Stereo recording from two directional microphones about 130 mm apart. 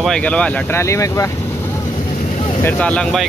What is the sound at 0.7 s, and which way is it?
Speech, 25° left (ahead or behind).